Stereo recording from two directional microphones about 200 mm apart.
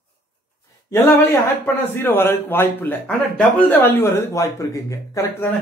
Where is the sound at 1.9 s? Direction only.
10° left (ahead or behind).